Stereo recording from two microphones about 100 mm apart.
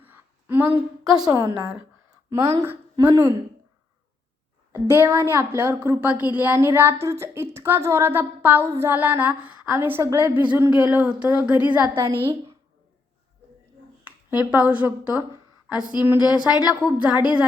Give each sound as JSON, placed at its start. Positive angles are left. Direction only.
{"t": 0.0, "sound": "a sound", "side_deg": -20}
{"t": 1.2, "sound": "a woman's voice", "side_deg": -35}
{"t": 4.7, "sound": "a woman's voice", "side_deg": -25}
{"t": 11.9, "sound": "a woman's voice", "side_deg": -25}
{"t": 14.0, "sound": "speech", "side_deg": -15}
{"t": 15.7, "sound": "a sound", "side_deg": -15}
{"t": 16.0, "sound": "speech", "side_deg": -10}